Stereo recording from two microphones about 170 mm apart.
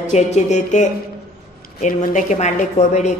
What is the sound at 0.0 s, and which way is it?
Speech, 45° left (ahead or behind).